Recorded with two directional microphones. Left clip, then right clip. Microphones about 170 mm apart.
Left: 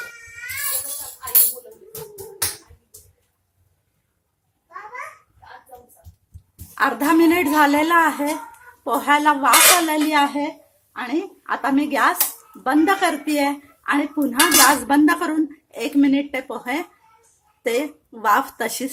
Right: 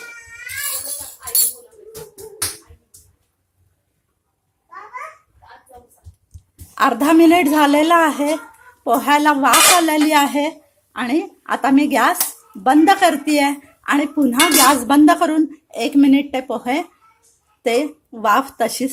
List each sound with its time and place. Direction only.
6.7 s a woman's voice: 30° right (ahead or behind)